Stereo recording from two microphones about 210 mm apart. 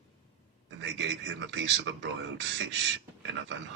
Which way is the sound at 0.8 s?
60° right (ahead or behind).